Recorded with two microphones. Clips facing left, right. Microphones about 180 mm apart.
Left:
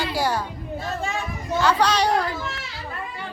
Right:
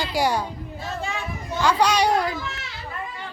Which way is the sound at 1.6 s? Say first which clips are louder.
Right 1 dB; 10° right (ahead or behind).